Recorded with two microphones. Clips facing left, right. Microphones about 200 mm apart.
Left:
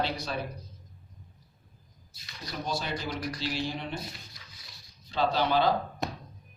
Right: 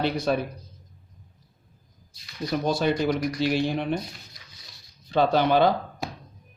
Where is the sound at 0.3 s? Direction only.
60° right (ahead or behind).